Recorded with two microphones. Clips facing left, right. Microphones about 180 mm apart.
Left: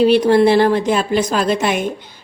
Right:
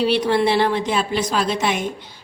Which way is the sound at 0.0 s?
45° left (ahead or behind).